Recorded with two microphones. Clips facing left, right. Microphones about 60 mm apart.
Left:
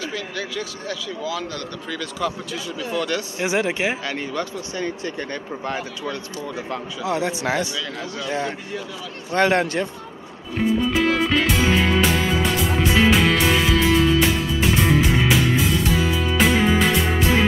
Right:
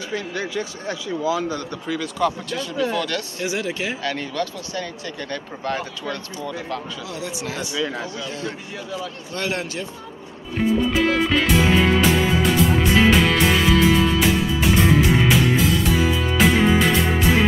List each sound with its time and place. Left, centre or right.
0.1 s a man's voice: right
2.0 s speech: centre; by 4.0 s left
4.0 s speech: centre; by 7.3 s left
7.6 s a man's voice: right
8.3 s speech: left
10.9 s music: centre